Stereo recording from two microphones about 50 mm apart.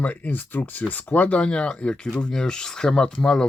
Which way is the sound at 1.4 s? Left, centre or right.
Centre.